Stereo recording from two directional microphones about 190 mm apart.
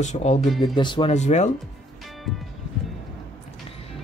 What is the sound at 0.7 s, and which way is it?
Speech, 25° left (ahead or behind).